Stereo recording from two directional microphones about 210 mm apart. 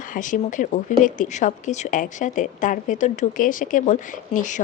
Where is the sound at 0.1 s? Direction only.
40° left (ahead or behind).